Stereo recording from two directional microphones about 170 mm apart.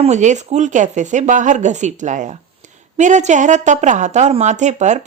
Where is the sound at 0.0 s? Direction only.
45° right (ahead or behind).